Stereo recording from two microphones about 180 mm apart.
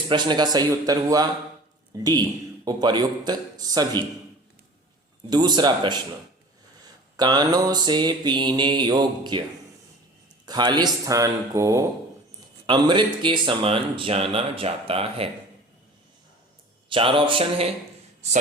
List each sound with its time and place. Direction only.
0.1 s mantra: 25° right (ahead or behind)
5.3 s mantra: 25° right (ahead or behind)
7.2 s mantra: 20° right (ahead or behind)
10.4 s mantra: 25° right (ahead or behind)
12.6 s speech: 25° right (ahead or behind)
16.9 s mantra: 30° right (ahead or behind)